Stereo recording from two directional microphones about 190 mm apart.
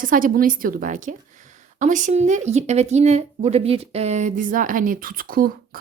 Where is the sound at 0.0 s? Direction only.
45° right (ahead or behind).